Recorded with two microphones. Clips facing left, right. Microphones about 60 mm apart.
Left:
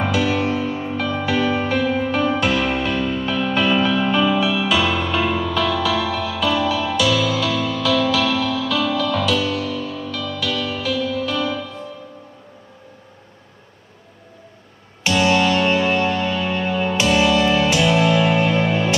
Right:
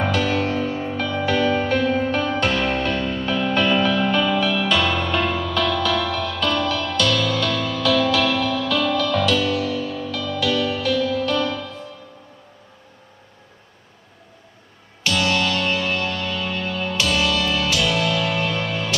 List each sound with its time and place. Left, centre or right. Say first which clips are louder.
0.0 s music: left 1 dB; centre
15.0 s music: left 4 dB; left